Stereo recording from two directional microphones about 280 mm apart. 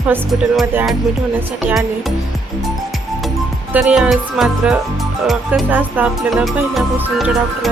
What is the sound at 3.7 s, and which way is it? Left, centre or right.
Music, centre.